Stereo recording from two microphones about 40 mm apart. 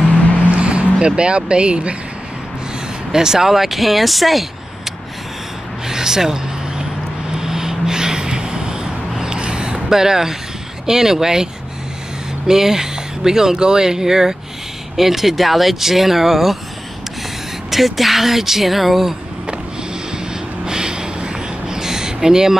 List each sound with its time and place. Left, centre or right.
0.6 s vehicle: right
0.9 s speech: right
3.1 s speech: centre
5.9 s speech: centre
7.2 s gasp: centre
9.2 s a sound: right
10.9 s speech: centre
12.4 s speech: centre
17.6 s speech: centre
20.6 s a sound: centre